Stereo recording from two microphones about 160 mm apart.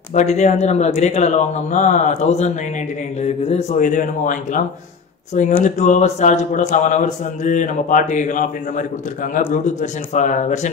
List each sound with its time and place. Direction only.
0.1 s speech: 45° left (ahead or behind)